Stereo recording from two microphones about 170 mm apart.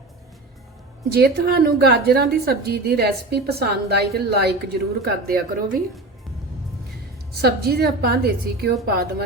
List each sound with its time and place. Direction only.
1.1 s a woman's voice: 65° right (ahead or behind)
7.4 s a woman's voice: 65° right (ahead or behind)